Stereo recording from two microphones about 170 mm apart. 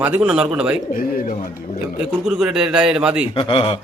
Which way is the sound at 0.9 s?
55° left (ahead or behind).